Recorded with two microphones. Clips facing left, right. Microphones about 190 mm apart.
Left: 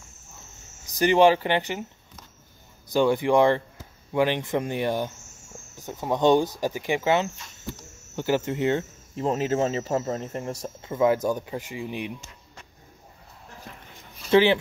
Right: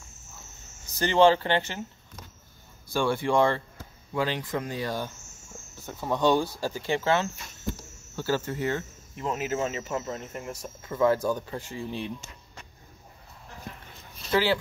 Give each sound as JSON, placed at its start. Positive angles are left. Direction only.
{"t": 0.8, "sound": "speech", "side_deg": 15}
{"t": 2.9, "sound": "speech", "side_deg": 15}
{"t": 10.8, "sound": "speech", "side_deg": 20}
{"t": 14.3, "sound": "speech", "side_deg": 20}